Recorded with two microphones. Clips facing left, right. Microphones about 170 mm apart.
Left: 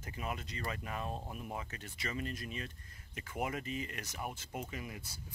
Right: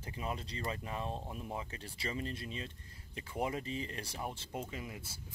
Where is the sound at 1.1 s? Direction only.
10° left (ahead or behind).